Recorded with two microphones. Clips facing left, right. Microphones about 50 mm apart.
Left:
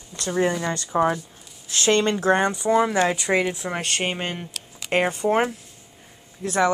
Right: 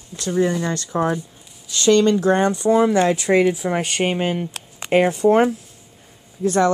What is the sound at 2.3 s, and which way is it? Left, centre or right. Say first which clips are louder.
Speech: right 3 dB; centre.